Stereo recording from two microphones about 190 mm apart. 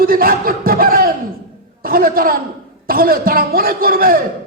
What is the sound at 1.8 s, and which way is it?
A man's voice, 50° right (ahead or behind).